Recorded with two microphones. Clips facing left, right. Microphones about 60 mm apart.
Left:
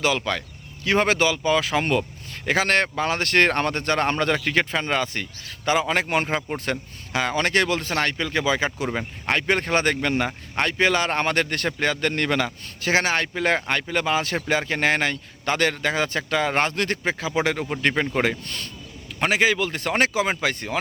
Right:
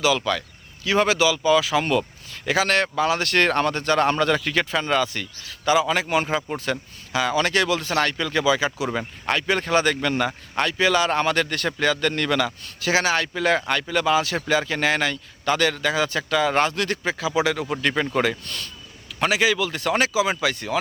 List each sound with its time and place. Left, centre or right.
0.2 s speech: left
0.9 s speech: left
8.9 s speech: left
10.7 s speech: left